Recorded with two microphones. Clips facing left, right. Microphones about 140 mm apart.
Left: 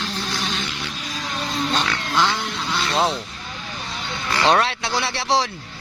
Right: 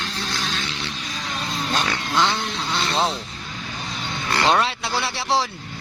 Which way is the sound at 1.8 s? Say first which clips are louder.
Even; 15° right (ahead or behind).